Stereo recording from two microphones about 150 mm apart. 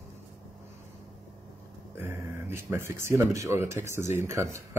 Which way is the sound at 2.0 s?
15° right (ahead or behind).